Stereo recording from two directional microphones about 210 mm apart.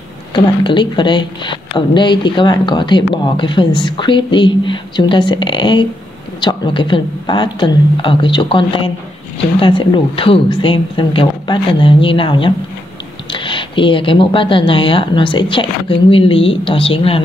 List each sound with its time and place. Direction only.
0.3 s a woman's voice: 20° left (ahead or behind)